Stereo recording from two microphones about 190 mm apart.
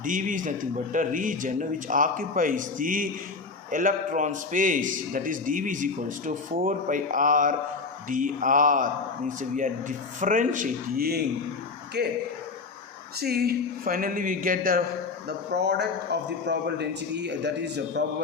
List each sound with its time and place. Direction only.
0.0 s a man's voice: 45° right (ahead or behind); by 12.1 s 60° right (ahead or behind)
13.1 s a man's voice: 55° right (ahead or behind)
15.5 s a man's voice: 60° right (ahead or behind)